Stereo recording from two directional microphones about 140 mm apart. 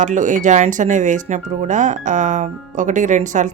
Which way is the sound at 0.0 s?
60° right (ahead or behind).